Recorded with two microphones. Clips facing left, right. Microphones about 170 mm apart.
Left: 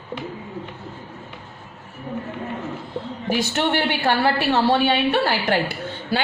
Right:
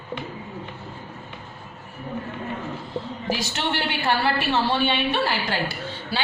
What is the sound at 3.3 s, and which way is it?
A woman's voice, 55° left (ahead or behind).